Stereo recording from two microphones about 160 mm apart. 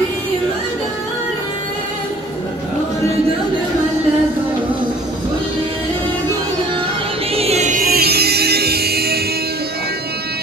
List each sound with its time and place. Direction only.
7.3 s music: 40° right (ahead or behind); by 9.2 s 80° right